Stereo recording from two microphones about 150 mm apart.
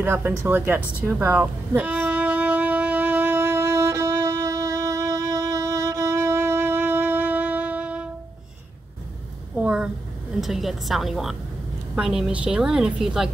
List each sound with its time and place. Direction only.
0.0 s speech: 15° right (ahead or behind)
1.0 s music: 15° right (ahead or behind)
9.6 s a sound: 5° right (ahead or behind)
10.4 s a woman's voice: centre (ahead or behind)